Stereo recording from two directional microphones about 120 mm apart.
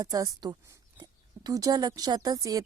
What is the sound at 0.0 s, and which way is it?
Speech, 30° right (ahead or behind).